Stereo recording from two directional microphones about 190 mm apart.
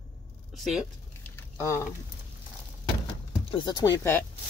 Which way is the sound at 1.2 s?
15° left (ahead or behind).